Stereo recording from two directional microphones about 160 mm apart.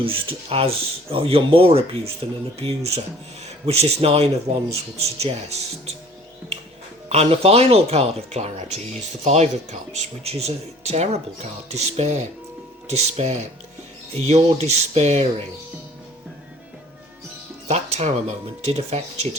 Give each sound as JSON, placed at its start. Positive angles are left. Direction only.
{"t": 0.0, "sound": "speech", "side_deg": -35}
{"t": 7.1, "sound": "speech", "side_deg": -40}
{"t": 17.7, "sound": "speech", "side_deg": -40}